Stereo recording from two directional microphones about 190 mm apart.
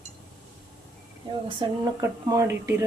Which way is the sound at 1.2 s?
25° right (ahead or behind).